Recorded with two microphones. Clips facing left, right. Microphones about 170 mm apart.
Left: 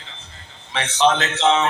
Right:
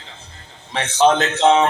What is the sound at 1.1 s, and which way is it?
Music, 40° right (ahead or behind).